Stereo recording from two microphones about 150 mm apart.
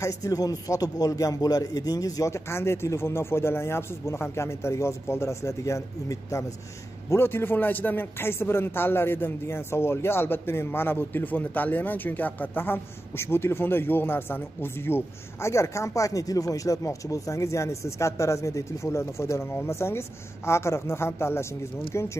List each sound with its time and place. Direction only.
0.0 s a man's voice: 20° left (ahead or behind)